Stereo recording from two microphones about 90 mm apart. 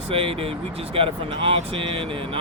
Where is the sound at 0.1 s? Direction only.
90° right.